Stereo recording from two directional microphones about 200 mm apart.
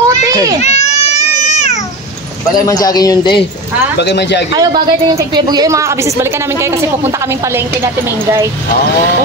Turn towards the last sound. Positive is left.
turn(degrees=-15)  # may be behind; listen again after turning